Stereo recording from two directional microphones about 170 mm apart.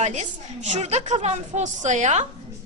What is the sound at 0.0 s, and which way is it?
A woman's voice, 40° right (ahead or behind).